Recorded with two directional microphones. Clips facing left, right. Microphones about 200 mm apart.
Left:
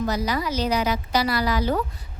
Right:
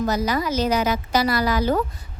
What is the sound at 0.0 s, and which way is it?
A woman's voice, 45° right (ahead or behind).